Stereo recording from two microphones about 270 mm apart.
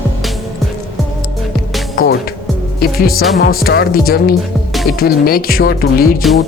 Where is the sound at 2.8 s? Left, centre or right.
Left.